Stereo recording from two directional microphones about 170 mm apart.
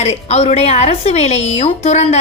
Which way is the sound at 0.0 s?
40° left (ahead or behind).